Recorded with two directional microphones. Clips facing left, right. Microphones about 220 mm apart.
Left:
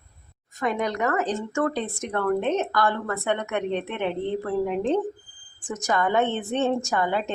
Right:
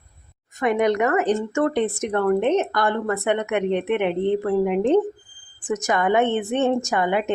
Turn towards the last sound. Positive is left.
turn(degrees=-15)  # may be behind; listen again after turning